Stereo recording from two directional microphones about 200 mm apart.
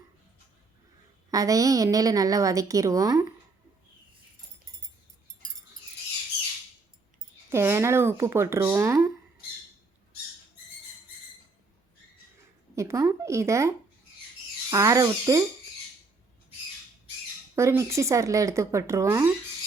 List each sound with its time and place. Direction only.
1.3 s a woman's voice: 15° right (ahead or behind)
7.5 s a woman's voice: 15° right (ahead or behind)
12.7 s a woman's voice: 15° right (ahead or behind)
17.5 s a woman's voice: 15° right (ahead or behind)